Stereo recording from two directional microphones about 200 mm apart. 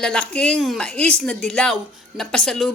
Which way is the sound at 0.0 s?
5° left (ahead or behind).